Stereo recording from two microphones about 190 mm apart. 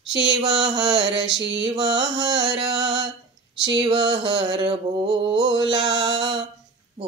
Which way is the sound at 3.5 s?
25° right (ahead or behind).